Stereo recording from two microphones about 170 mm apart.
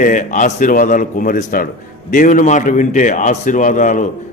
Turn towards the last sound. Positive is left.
turn(degrees=50)  # may be behind; listen again after turning